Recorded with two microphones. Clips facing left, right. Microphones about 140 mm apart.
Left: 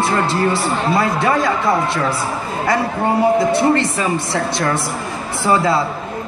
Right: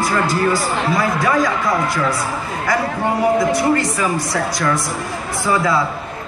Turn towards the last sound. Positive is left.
turn(degrees=30)  # may be behind; listen again after turning